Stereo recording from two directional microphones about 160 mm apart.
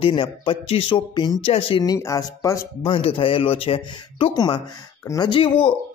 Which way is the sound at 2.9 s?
35° left (ahead or behind).